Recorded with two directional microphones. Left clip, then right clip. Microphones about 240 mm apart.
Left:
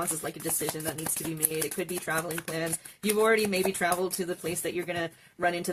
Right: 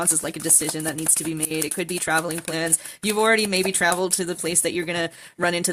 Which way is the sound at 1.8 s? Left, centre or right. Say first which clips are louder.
Right 11 dB; right.